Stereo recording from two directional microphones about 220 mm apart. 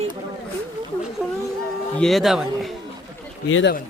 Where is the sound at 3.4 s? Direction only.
65° left (ahead or behind).